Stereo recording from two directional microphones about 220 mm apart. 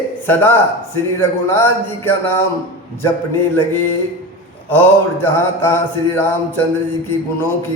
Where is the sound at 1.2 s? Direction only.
10° left (ahead or behind).